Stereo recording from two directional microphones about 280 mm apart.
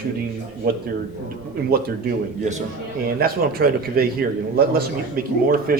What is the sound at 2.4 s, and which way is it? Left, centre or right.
A man's voice, right.